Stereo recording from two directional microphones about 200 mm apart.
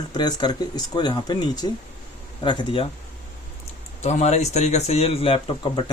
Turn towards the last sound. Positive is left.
turn(degrees=25)  # may be behind; listen again after turning